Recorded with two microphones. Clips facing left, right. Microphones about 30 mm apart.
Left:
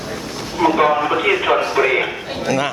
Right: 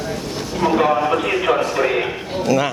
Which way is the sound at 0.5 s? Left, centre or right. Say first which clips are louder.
Left 2 dB; centre.